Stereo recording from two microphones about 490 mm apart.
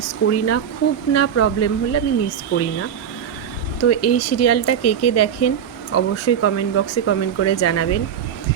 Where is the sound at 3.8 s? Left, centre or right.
Left.